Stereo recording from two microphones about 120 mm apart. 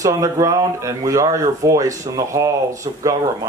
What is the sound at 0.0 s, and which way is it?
Speech, 25° right (ahead or behind).